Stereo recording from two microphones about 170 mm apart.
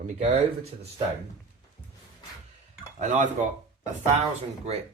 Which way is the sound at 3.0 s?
45° right (ahead or behind).